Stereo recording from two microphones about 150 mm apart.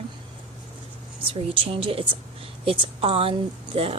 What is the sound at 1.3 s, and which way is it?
A woman's voice, 35° right (ahead or behind).